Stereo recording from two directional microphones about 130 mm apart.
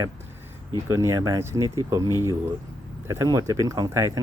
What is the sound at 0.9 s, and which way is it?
Speech, 25° right (ahead or behind).